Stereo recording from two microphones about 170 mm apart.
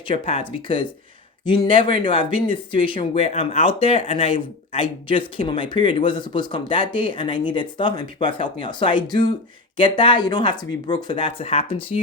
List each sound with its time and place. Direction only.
0.0 s speech: 30° left (ahead or behind)